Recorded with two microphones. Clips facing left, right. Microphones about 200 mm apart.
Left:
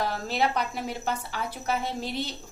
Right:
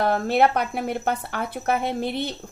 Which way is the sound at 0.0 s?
55° right (ahead or behind).